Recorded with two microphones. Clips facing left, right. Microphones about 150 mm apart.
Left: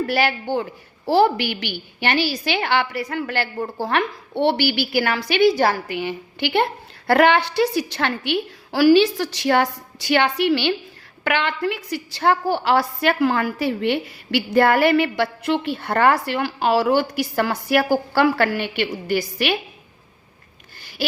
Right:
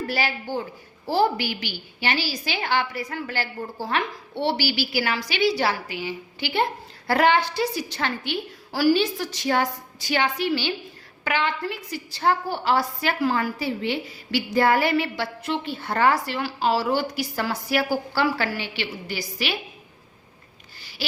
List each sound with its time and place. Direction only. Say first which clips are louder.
0.1 s a woman's voice: left 6 dB; 65° left (ahead or behind)